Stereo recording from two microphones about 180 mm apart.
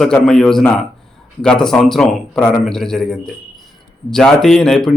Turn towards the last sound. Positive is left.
turn(degrees=5)  # may be behind; listen again after turning